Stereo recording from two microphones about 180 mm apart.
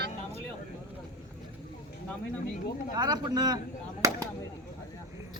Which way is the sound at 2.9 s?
20° right (ahead or behind).